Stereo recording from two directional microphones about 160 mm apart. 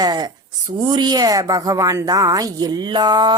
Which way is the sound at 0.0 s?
25° right (ahead or behind).